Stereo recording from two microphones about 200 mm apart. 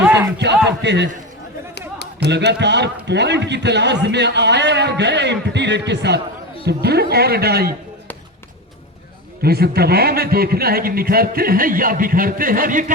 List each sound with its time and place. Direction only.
0.0 s a sound: 10° right (ahead or behind)
0.3 s a man's voice: 60° right (ahead or behind)
2.2 s a man's voice: 60° right (ahead or behind)
9.4 s a man's voice: 50° right (ahead or behind)